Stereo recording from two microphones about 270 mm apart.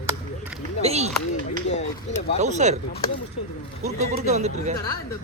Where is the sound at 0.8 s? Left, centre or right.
Right.